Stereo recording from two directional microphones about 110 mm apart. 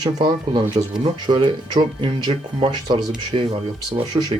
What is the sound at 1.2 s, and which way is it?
A man's voice, 45° right (ahead or behind).